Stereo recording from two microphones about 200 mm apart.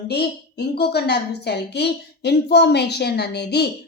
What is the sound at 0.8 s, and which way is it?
A woman's voice, 55° left (ahead or behind).